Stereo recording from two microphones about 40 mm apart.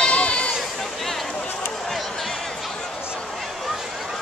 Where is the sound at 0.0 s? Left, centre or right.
Left.